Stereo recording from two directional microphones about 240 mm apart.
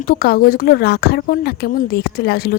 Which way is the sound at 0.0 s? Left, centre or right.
Left.